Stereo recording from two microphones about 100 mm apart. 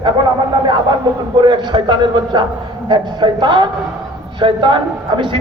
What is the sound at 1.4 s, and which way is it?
A man's voice, 50° right (ahead or behind).